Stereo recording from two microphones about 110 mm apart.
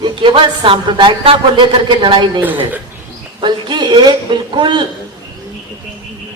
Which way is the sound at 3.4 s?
45° right (ahead or behind).